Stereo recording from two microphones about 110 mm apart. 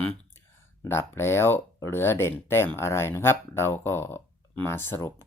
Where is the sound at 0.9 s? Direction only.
25° left (ahead or behind).